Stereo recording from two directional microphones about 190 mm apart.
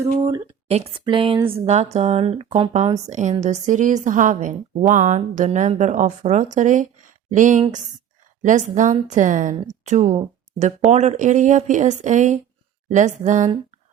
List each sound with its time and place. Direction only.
0.0 s speech: 15° right (ahead or behind)
0.7 s a woman's voice: 30° right (ahead or behind)